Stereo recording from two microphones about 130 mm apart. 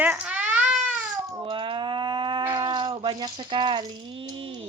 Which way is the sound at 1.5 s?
40° right (ahead or behind).